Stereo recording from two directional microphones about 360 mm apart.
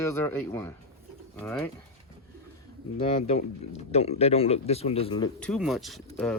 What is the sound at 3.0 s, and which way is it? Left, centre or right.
Speech, centre.